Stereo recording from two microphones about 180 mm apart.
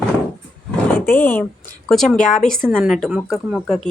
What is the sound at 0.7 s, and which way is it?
Speech, 10° left (ahead or behind).